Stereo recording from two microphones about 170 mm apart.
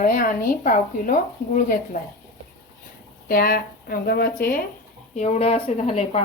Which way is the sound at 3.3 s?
60° left (ahead or behind).